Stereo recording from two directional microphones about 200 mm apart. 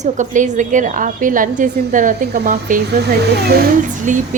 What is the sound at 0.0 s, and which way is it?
A woman's voice, 40° right (ahead or behind).